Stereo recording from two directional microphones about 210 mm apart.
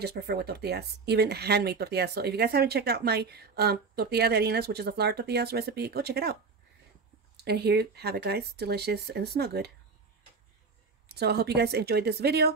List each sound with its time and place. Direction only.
0.0 s speech: 50° right (ahead or behind)
7.3 s speech: 50° right (ahead or behind)
11.1 s speech: 50° right (ahead or behind)